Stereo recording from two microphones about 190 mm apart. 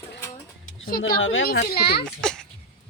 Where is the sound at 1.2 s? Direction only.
90° left.